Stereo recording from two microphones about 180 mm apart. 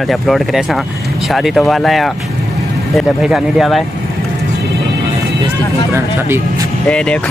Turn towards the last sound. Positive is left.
turn(degrees=5)  # may be behind; listen again after turning